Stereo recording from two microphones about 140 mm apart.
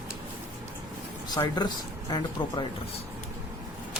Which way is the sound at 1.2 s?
30° left (ahead or behind).